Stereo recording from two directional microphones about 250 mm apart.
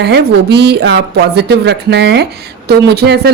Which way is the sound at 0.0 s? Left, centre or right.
Right.